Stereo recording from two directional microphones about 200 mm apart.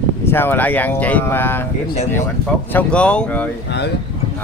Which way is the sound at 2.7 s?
5° left (ahead or behind).